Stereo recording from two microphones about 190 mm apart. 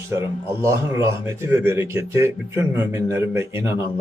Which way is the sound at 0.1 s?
15° right (ahead or behind).